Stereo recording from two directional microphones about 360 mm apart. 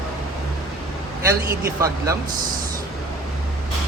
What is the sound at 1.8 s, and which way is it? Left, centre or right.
Speech, centre.